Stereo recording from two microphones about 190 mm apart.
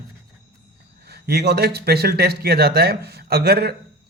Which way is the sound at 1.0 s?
55° right (ahead or behind).